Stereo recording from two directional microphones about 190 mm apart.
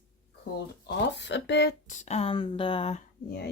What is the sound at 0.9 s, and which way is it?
Speech, 65° left (ahead or behind).